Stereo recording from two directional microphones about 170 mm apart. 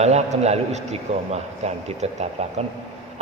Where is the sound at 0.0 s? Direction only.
40° right (ahead or behind).